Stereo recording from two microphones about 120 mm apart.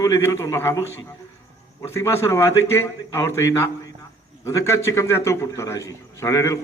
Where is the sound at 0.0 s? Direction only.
25° left (ahead or behind).